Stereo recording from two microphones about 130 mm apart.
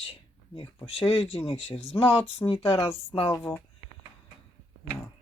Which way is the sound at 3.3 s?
25° left (ahead or behind).